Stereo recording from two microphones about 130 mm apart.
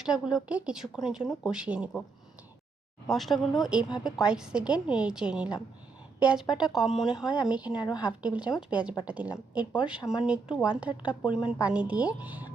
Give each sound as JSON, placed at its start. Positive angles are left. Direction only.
{"t": 0.0, "sound": "speech", "side_deg": -5}
{"t": 3.1, "sound": "speech", "side_deg": 0}
{"t": 7.8, "sound": "speech", "side_deg": 30}
{"t": 8.0, "sound": "speech", "side_deg": -10}